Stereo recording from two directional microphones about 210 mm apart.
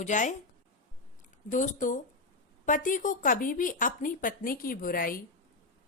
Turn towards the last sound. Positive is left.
turn(degrees=45)  # may be behind; listen again after turning